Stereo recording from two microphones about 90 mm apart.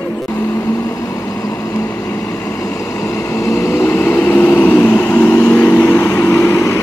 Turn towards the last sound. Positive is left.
turn(degrees=30)  # may be behind; listen again after turning